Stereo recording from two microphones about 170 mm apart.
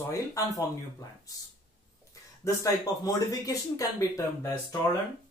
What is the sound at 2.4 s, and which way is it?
Speech, 20° left (ahead or behind).